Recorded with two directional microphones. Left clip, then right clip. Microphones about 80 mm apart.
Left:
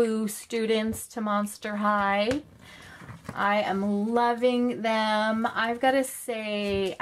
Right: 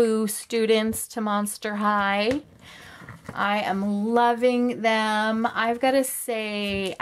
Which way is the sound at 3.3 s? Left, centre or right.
Right.